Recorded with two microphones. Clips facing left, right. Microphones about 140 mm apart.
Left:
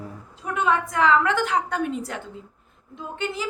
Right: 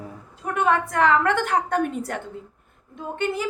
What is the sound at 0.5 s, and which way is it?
A woman's voice, 55° right (ahead or behind).